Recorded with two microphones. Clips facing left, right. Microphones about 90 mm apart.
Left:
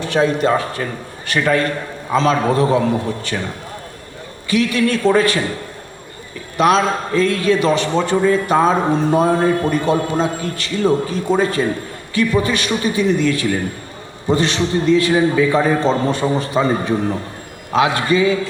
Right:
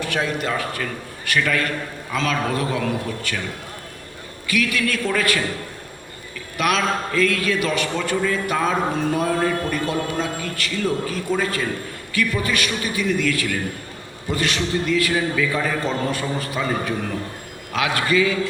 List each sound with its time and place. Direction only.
0.0 s a man's voice: 30° left (ahead or behind)
6.6 s a man's voice: 30° left (ahead or behind)